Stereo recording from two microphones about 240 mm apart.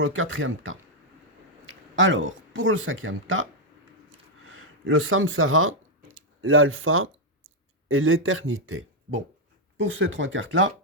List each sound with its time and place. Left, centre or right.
0.0 s speech: right
4.4 s speech: right